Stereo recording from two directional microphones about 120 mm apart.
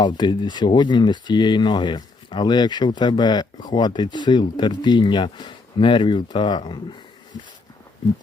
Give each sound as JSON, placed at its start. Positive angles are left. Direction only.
{"t": 0.0, "sound": "speech", "side_deg": 40}